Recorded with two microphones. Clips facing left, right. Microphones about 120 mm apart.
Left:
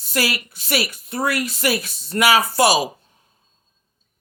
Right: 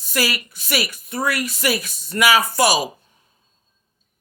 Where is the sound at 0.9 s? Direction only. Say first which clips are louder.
Left 1 dB; 55° left (ahead or behind).